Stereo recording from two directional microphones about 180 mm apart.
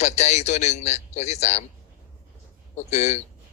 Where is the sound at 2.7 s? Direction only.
40° left (ahead or behind).